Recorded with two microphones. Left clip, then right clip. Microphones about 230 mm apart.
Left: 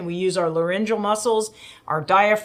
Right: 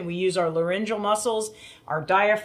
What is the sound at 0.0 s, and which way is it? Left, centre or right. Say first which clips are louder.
Speech: left 2 dB; left.